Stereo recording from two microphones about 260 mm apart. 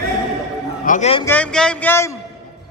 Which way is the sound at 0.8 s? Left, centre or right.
Left.